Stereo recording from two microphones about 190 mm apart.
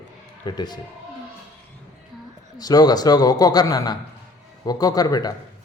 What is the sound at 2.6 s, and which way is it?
A man's voice, 20° left (ahead or behind).